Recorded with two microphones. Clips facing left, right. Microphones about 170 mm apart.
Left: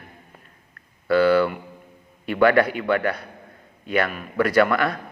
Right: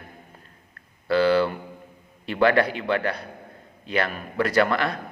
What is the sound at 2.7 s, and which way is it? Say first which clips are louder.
A man's voice: left 3 dB; 30° right (ahead or behind).